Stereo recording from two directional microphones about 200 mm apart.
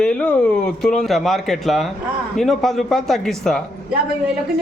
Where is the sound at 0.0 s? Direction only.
5° left (ahead or behind).